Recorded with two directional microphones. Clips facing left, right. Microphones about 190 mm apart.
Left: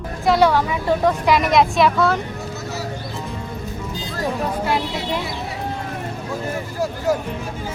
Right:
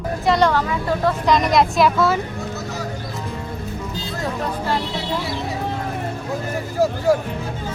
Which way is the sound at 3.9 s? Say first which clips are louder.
Left 3 dB; 15° left (ahead or behind).